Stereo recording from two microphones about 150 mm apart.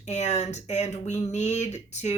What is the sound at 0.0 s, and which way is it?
Speech, 45° left (ahead or behind).